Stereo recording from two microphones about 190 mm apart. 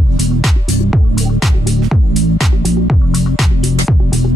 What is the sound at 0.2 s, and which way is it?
Music, centre (ahead or behind).